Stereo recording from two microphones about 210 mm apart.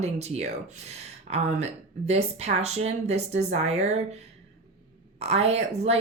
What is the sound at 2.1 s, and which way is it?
Speech, 30° right (ahead or behind).